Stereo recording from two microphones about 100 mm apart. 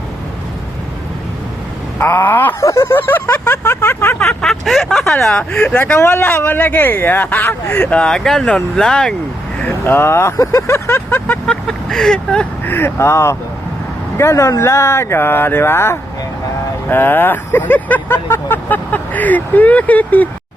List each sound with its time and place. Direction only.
2.0 s speech: 20° left (ahead or behind)
4.2 s speech: 5° left (ahead or behind)
9.6 s speech: 20° left (ahead or behind)
11.4 s speech: 5° left (ahead or behind)
12.6 s speech: 20° left (ahead or behind)